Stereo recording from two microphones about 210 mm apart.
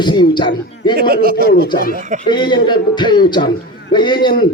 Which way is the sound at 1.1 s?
45° right (ahead or behind).